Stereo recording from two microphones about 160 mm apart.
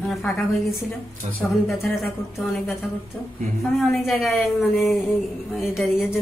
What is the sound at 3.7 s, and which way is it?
A woman's voice, centre (ahead or behind).